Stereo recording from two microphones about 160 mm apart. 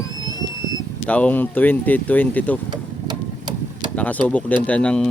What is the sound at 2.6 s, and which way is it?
Vehicle, 25° right (ahead or behind).